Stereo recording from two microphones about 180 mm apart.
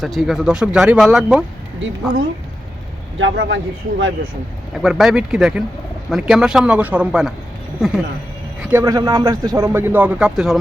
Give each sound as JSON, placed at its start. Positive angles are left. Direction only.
{"t": 0.0, "sound": "speech", "side_deg": 0}
{"t": 3.2, "sound": "speech", "side_deg": -90}
{"t": 4.7, "sound": "speech", "side_deg": 0}
{"t": 8.6, "sound": "a man's voice", "side_deg": -15}